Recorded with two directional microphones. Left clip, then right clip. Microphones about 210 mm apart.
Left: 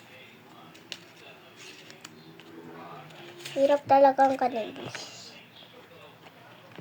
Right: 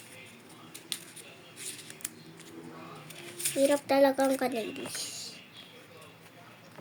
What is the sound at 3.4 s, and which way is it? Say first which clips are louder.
Speech: left 3 dB; 10° right (ahead or behind).